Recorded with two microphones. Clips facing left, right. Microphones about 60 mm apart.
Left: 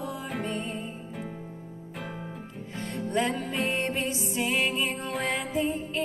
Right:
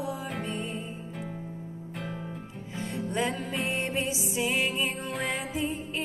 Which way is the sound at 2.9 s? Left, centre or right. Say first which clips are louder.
Left 2 dB; centre.